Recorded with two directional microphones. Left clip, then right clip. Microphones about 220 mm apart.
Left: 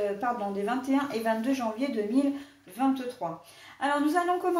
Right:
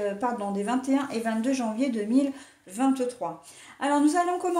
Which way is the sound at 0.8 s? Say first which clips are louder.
Even; 45° right (ahead or behind).